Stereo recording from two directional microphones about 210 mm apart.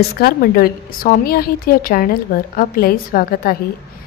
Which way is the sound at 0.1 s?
45° left (ahead or behind).